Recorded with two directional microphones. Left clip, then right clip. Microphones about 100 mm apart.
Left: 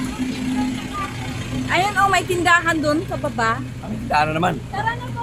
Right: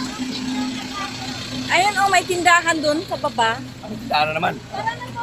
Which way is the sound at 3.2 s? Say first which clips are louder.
Right 3 dB; 10° right (ahead or behind).